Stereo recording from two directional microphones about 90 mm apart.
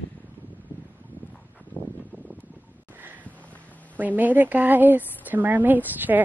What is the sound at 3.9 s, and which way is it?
A woman's voice, 20° right (ahead or behind).